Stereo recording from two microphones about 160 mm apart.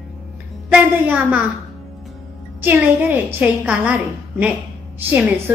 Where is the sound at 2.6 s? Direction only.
15° right (ahead or behind).